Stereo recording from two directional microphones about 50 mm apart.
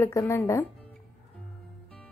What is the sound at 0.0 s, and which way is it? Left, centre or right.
Speech, left.